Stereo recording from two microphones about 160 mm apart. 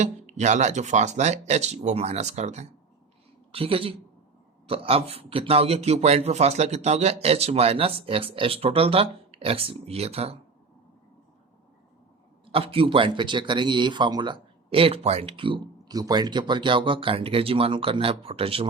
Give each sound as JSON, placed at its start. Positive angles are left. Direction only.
{"t": 0.0, "sound": "speech", "side_deg": -45}
{"t": 12.5, "sound": "speech", "side_deg": -35}